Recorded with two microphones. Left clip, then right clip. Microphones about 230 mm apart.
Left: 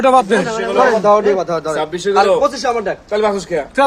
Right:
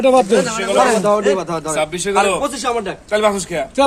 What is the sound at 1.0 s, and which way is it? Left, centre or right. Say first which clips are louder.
Speech: left 3 dB; right.